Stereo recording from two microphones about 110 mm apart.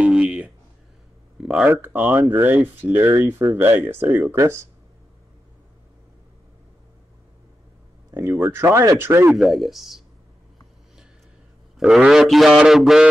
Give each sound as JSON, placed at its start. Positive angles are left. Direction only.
{"t": 0.0, "sound": "a sound", "side_deg": -10}
{"t": 1.7, "sound": "speech", "side_deg": -20}
{"t": 8.1, "sound": "speech", "side_deg": -30}
{"t": 9.3, "sound": "speech", "side_deg": 0}
{"t": 11.8, "sound": "speech", "side_deg": -5}